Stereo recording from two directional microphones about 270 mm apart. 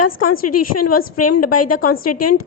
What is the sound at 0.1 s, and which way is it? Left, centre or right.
A woman's voice, left.